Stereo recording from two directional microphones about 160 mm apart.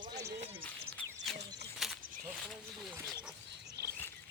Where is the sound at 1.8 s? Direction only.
Centre (ahead or behind).